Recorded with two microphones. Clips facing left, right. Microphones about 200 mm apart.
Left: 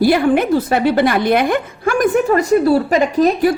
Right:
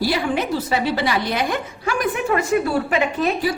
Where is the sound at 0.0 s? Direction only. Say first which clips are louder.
Left 8 dB; 55° left (ahead or behind).